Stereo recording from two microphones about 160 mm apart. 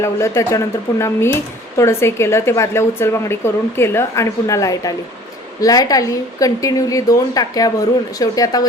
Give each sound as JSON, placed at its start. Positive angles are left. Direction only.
{"t": 0.0, "sound": "a woman's voice", "side_deg": 15}